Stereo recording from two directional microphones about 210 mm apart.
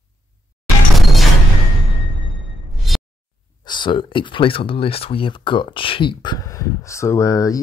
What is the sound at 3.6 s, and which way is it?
Speech, 20° left (ahead or behind).